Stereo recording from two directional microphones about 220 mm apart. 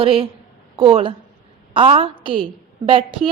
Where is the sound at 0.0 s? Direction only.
25° right (ahead or behind).